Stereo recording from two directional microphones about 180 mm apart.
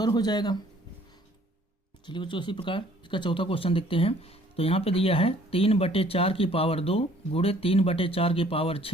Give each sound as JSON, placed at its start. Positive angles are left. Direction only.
{"t": 0.0, "sound": "speech", "side_deg": 25}
{"t": 2.0, "sound": "speech", "side_deg": 25}